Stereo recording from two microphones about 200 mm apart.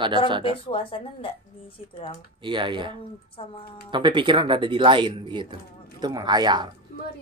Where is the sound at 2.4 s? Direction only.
25° right (ahead or behind).